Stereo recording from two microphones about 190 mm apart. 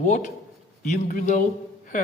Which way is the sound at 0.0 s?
40° left (ahead or behind).